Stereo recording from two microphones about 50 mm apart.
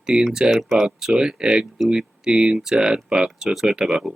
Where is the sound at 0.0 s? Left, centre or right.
Centre.